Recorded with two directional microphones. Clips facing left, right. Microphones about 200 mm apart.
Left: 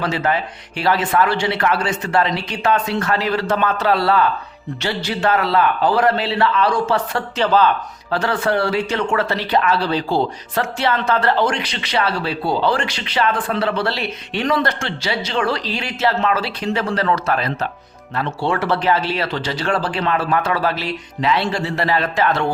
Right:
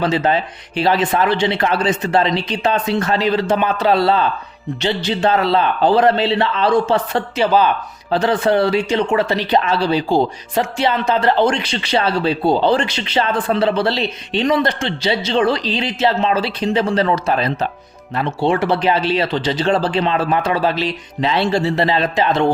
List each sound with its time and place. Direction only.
0.0 s speech: 20° right (ahead or behind)
7.3 s speech: 10° right (ahead or behind)